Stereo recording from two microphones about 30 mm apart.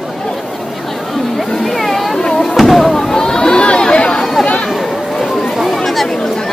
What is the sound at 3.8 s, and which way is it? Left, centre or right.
Chatter, left.